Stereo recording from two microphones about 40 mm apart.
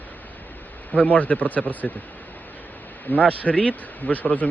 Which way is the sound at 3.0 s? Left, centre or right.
Left.